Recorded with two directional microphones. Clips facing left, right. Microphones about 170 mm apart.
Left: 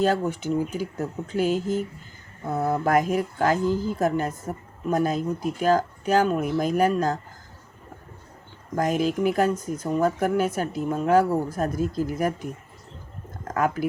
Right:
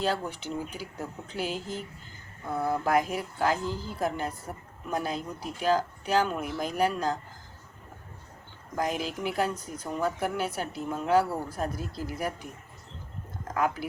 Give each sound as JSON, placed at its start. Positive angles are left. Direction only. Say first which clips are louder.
{"t": 0.0, "sound": "speech", "louder": "left 7 dB", "side_deg": 45}
{"t": 8.7, "sound": "speech", "louder": "left 7 dB", "side_deg": 45}
{"t": 13.5, "sound": "speech", "louder": "left 4 dB", "side_deg": 45}